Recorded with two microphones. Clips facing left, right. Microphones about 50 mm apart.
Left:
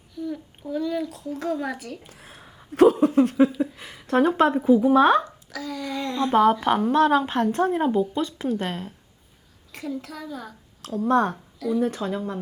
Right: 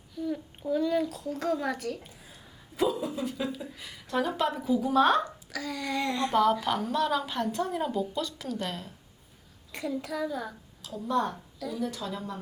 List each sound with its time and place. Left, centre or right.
0.2 s a child's voice: centre
2.0 s speech: left
3.8 s a woman's voice: left
5.5 s speech: centre
6.3 s a woman's voice: left
9.7 s speech: centre
10.8 s a woman's voice: left